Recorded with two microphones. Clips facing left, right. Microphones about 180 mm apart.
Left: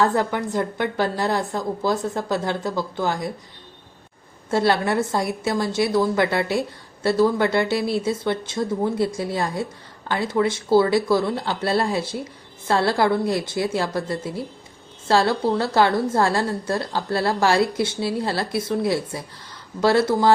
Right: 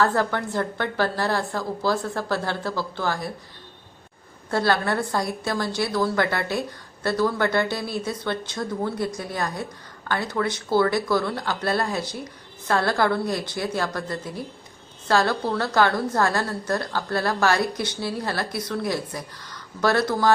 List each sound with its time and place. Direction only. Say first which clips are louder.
0.0 s speech: left 2 dB; 20° left (ahead or behind)
4.5 s speech: left 3 dB; 25° left (ahead or behind)